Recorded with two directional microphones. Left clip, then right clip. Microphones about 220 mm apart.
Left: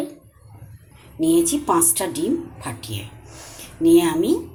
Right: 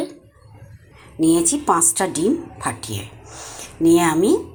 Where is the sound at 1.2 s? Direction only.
20° right (ahead or behind).